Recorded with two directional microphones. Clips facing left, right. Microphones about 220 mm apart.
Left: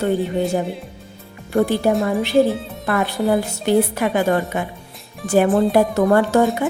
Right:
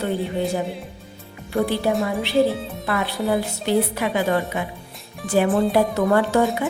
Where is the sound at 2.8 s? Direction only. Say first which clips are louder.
Left 4 dB; 45° left (ahead or behind).